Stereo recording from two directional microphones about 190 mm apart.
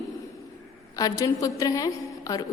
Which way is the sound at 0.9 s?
20° left (ahead or behind).